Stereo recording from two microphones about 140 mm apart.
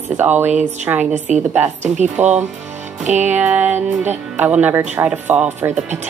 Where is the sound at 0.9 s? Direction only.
10° right (ahead or behind).